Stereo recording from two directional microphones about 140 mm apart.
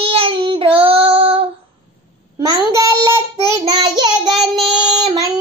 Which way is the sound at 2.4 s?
25° right (ahead or behind).